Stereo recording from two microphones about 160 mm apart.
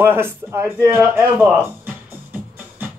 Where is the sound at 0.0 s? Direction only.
15° right (ahead or behind).